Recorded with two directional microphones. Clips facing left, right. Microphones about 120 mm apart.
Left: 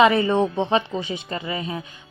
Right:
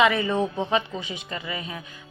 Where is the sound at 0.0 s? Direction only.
35° left (ahead or behind).